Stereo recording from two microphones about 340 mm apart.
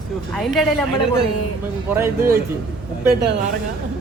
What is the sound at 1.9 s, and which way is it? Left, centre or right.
Speech, centre.